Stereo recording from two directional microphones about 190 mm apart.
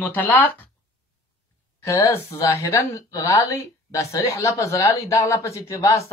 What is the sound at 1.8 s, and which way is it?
Speech, 15° left (ahead or behind).